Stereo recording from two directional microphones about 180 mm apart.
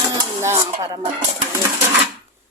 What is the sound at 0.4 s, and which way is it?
Speech, 15° right (ahead or behind).